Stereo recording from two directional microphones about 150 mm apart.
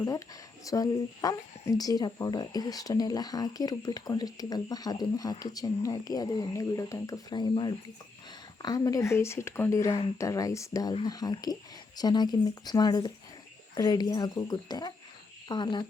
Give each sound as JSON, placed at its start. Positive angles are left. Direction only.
{"t": 0.6, "sound": "speech", "side_deg": 25}